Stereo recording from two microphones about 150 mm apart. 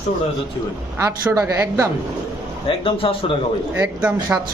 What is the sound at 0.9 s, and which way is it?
Speech, 20° right (ahead or behind).